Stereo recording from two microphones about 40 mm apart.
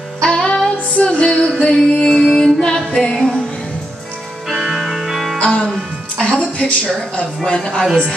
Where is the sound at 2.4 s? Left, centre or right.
Centre.